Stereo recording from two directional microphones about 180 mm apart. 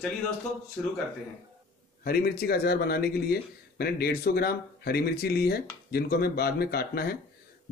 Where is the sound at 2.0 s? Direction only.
55° left (ahead or behind).